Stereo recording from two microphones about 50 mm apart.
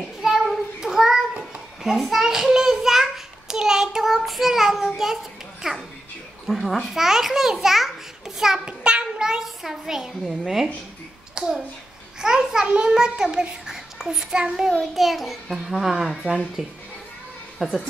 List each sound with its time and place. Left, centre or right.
0.2 s child singing: centre
6.4 s a child's voice: centre
8.6 s a sound: centre
10.4 s a child's voice: centre
14.8 s a child's voice: centre